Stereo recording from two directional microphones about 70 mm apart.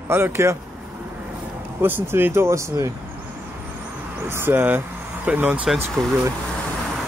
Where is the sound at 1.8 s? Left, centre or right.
Right.